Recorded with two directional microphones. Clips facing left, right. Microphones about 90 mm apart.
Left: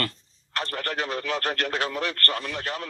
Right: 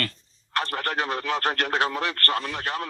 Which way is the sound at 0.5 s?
30° right (ahead or behind).